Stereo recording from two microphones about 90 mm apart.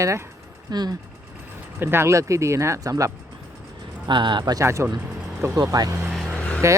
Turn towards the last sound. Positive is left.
turn(degrees=15)  # may be behind; listen again after turning